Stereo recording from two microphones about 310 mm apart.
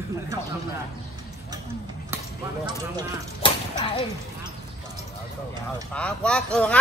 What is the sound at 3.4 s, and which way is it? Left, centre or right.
Mechanisms, centre.